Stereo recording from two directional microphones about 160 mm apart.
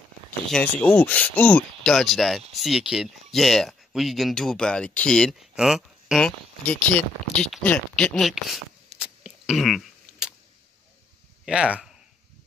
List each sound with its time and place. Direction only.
0.5 s speech: 5° left (ahead or behind)
8.8 s a sound: 35° left (ahead or behind)
9.2 s throat clearing: centre (ahead or behind)
11.4 s speech: 5° right (ahead or behind)